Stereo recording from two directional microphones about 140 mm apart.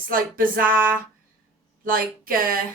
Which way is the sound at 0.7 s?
10° right (ahead or behind).